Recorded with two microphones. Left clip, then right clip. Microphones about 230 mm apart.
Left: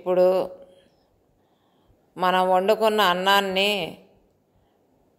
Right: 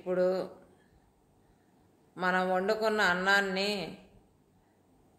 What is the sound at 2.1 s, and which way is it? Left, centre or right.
Speech, left.